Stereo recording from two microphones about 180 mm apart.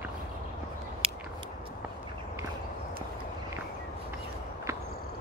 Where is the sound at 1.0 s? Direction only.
30° right (ahead or behind).